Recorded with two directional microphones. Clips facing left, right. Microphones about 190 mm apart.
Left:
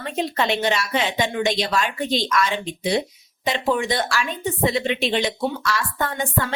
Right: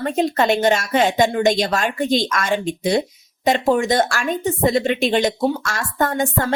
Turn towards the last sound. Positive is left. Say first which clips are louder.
# right 5 dB
turn(degrees=-45)  # may be behind; listen again after turning